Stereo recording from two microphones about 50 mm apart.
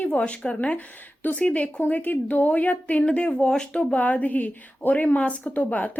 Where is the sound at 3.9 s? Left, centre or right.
Left.